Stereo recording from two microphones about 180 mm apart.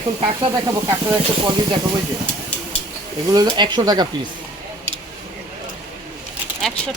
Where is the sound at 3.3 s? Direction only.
25° right (ahead or behind).